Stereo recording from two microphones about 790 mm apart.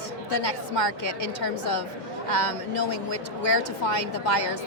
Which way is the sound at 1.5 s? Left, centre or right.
Left.